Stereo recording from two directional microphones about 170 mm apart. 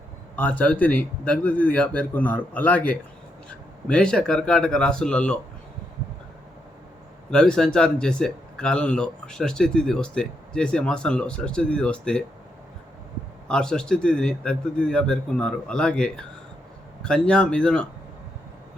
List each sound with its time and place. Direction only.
0.3 s speech: 10° left (ahead or behind)
7.3 s speech: 5° left (ahead or behind)
13.5 s speech: 5° left (ahead or behind)